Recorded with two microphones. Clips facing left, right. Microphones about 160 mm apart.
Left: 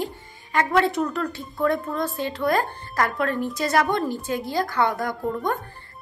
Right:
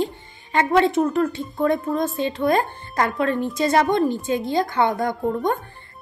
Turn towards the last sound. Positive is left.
turn(degrees=-25)  # may be behind; listen again after turning